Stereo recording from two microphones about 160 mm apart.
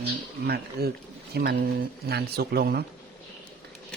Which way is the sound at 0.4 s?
80° right.